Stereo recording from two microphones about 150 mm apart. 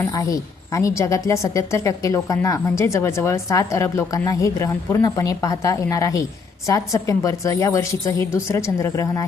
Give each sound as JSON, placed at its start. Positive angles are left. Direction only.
{"t": 0.0, "sound": "a woman's voice", "side_deg": 20}